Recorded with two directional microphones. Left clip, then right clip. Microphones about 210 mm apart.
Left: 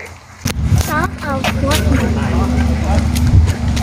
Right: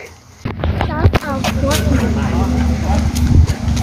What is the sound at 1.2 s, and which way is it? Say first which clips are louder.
Vehicle: left 1 dB; 5° right (ahead or behind).